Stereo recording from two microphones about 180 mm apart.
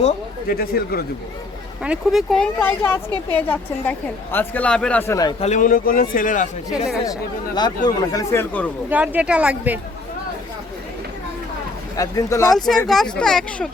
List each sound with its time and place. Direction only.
0.4 s speech: 55° left (ahead or behind)
1.8 s a woman's voice: 5° right (ahead or behind); by 5.3 s 15° left (ahead or behind)
5.4 s a man's voice: 45° left (ahead or behind)
7.0 s a woman's voice: 20° left (ahead or behind)
8.9 s speech: 10° right (ahead or behind)
11.9 s speech: 20° left (ahead or behind)
12.5 s speech: 5° left (ahead or behind)